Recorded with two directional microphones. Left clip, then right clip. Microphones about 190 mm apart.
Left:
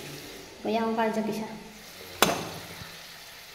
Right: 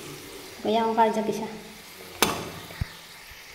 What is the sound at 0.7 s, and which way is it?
Speech, 20° right (ahead or behind).